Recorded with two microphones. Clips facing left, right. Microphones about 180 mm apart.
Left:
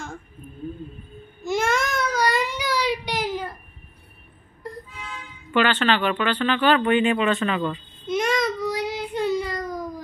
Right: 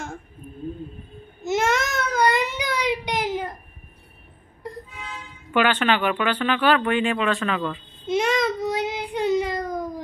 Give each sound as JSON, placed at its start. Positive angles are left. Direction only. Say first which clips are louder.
{"t": 1.4, "sound": "child singing", "louder": "right 1 dB", "side_deg": -20}
{"t": 5.5, "sound": "speech", "louder": "even", "side_deg": -10}
{"t": 8.1, "sound": "child singing", "louder": "right 1 dB", "side_deg": -25}